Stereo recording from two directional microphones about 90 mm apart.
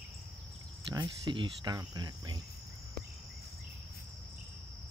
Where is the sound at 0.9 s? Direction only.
65° right (ahead or behind).